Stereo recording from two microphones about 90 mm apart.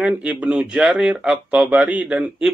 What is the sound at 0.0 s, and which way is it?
Speech, 15° right (ahead or behind).